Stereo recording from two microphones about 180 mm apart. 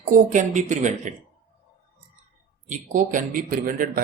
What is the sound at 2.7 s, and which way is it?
Speech, 45° right (ahead or behind).